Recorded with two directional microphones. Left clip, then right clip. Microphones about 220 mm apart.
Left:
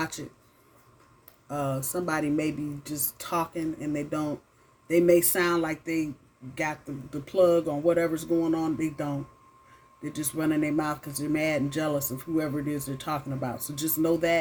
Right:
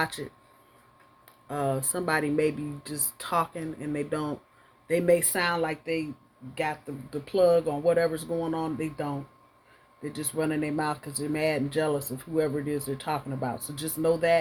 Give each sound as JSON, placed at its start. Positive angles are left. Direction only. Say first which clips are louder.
{"t": 1.5, "sound": "speech", "louder": "right 2 dB", "side_deg": -30}